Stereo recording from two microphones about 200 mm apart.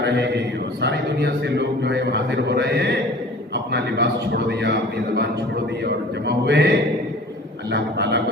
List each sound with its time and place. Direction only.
0.0 s a man's voice: 55° right (ahead or behind)
5.8 s a man's voice: 60° right (ahead or behind)